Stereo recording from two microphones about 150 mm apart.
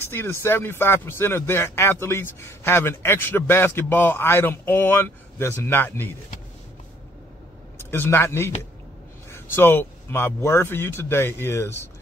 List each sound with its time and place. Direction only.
0.0 s speech: 15° left (ahead or behind)
7.9 s speech: 15° left (ahead or behind)